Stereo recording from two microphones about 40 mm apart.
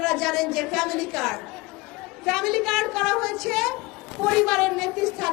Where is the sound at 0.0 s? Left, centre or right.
Centre.